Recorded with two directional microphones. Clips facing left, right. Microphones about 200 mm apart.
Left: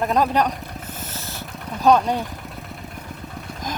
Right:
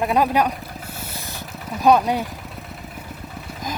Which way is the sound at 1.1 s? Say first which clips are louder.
Even; 15° right (ahead or behind).